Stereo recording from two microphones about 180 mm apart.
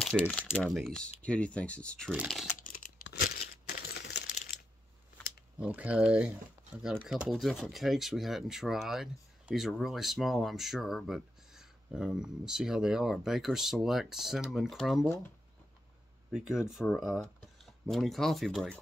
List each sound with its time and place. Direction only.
0.3 s speech: 5° left (ahead or behind)
2.6 s computer keyboard: 50° left (ahead or behind)
5.6 s speech: 10° right (ahead or behind)
16.3 s speech: 5° right (ahead or behind)